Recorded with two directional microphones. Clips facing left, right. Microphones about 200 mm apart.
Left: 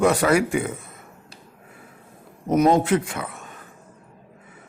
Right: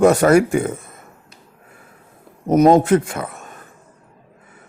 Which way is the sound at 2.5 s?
45° right (ahead or behind).